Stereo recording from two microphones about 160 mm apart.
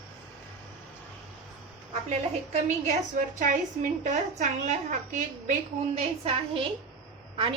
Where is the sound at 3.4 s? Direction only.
55° right (ahead or behind).